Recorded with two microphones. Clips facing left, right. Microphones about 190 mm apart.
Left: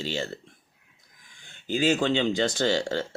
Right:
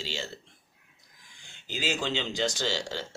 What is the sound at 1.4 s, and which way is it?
Speech, 55° left (ahead or behind).